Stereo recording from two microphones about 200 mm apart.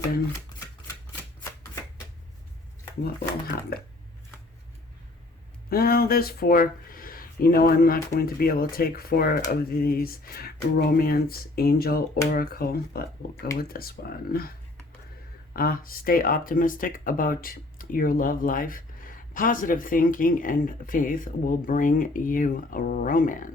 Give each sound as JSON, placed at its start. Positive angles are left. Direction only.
{"t": 3.0, "sound": "speech", "side_deg": 50}
{"t": 5.6, "sound": "speech", "side_deg": 50}
{"t": 15.5, "sound": "speech", "side_deg": 45}